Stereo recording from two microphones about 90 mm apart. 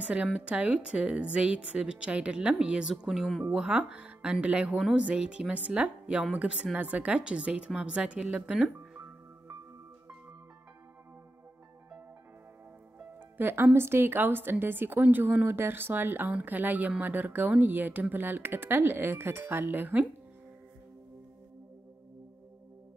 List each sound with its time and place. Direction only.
0.1 s a woman's voice: 10° right (ahead or behind)
13.4 s a woman's voice: 25° right (ahead or behind)